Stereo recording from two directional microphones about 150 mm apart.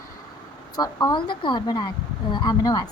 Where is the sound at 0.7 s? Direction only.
25° left (ahead or behind).